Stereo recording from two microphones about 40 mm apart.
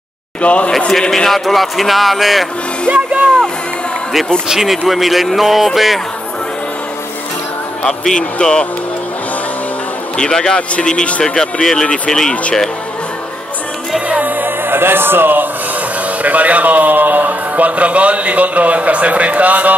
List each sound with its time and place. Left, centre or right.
0.4 s a man's voice: left
0.7 s speech: centre
1.4 s speech: centre
2.9 s speech: right
4.5 s speech: centre
7.8 s speech: centre
10.1 s speech: centre
14.2 s music: right
16.2 s a man's voice: right